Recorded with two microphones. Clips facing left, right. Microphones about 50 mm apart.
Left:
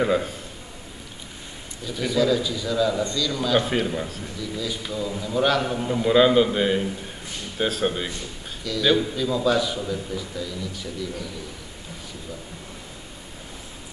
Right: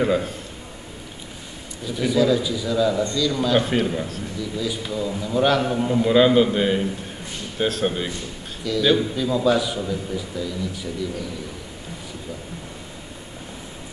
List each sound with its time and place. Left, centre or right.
0.0 s a man's voice: centre
1.9 s a man's voice: centre